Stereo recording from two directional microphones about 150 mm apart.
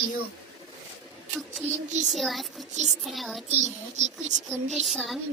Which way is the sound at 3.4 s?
50° right (ahead or behind).